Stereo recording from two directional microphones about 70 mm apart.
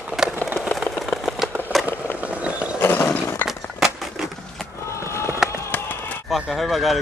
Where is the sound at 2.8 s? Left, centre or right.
Left.